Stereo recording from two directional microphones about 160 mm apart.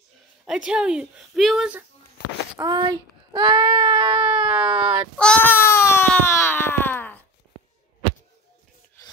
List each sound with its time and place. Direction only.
0.5 s a woman's voice: 5° right (ahead or behind)
2.6 s speech: 25° right (ahead or behind)
4.5 s speech: 5° right (ahead or behind)
5.1 s baby cry: 5° left (ahead or behind)